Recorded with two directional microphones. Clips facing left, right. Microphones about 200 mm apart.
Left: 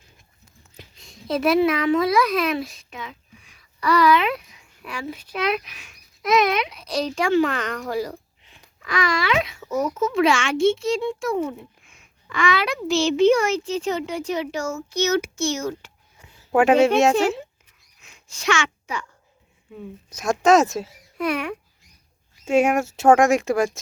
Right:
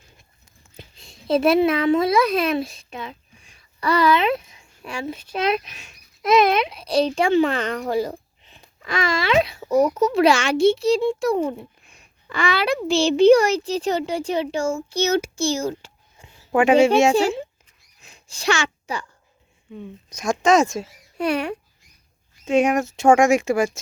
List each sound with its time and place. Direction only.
0.8 s a child's voice: 30° right (ahead or behind)
16.5 s speech: 5° left (ahead or behind)
18.0 s a sound: 35° right (ahead or behind)
19.7 s speech: 5° left (ahead or behind)
21.2 s a child's voice: 30° right (ahead or behind)
22.4 s speech: 5° left (ahead or behind)